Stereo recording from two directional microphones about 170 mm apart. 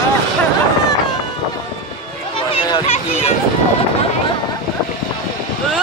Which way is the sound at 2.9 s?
35° left (ahead or behind).